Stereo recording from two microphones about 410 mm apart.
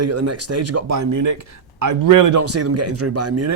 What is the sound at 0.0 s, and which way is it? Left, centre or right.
Speech, right.